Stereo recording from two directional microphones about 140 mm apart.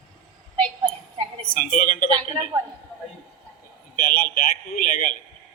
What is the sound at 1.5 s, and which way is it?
Speech, 80° left.